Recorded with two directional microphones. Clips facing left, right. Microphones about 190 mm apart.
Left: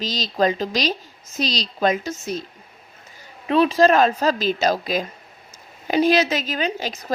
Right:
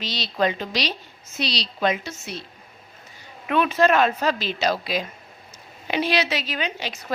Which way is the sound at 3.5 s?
30° left (ahead or behind).